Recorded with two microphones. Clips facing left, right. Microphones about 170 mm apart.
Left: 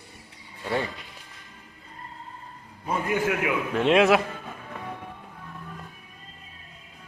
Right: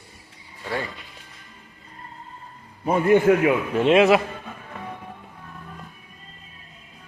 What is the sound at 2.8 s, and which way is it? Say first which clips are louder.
Speech: right 10 dB; 55° right (ahead or behind).